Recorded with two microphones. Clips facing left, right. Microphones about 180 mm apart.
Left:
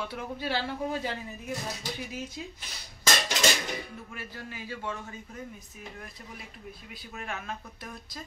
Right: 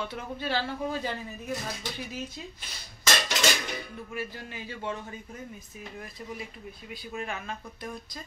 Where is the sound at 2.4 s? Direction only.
10° left (ahead or behind).